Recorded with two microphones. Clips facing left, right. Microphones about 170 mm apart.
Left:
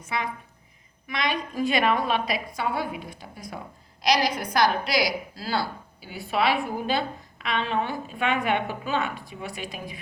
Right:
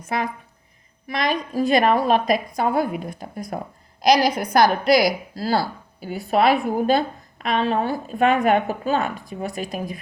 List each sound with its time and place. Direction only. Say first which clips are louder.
0.1 s a woman's voice: right 5 dB; 45° right (ahead or behind)